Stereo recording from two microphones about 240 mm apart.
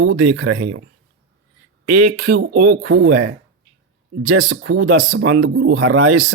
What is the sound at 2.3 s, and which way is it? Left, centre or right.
Speech, right.